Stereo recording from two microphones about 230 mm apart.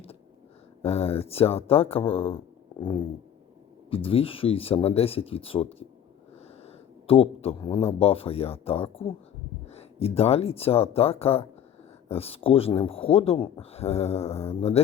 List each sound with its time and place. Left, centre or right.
0.8 s speech: left
3.8 s speech: left
7.1 s speech: left